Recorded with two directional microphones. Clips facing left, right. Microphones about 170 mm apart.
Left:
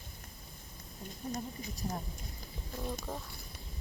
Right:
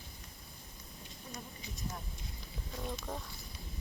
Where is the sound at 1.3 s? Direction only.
40° left (ahead or behind).